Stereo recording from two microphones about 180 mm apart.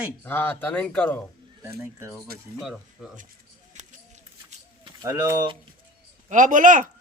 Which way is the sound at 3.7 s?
40° right (ahead or behind).